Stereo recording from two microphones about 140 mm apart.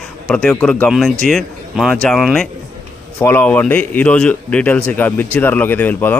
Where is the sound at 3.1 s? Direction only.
15° left (ahead or behind).